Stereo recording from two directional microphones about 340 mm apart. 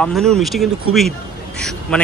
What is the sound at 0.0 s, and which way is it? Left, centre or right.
Speech, centre.